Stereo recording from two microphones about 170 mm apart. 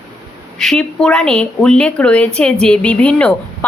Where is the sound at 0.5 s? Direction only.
5° left (ahead or behind).